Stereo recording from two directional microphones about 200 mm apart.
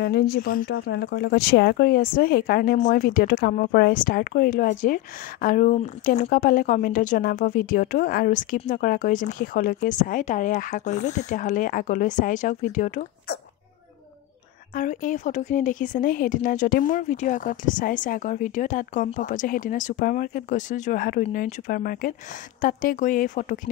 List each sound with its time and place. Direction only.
0.0 s speech: 55° left (ahead or behind)
0.7 s speech: 55° left (ahead or behind); by 13.4 s 40° left (ahead or behind)
14.7 s speech: 40° left (ahead or behind)